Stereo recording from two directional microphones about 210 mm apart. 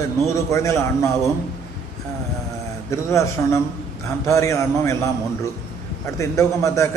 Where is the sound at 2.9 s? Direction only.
15° left (ahead or behind).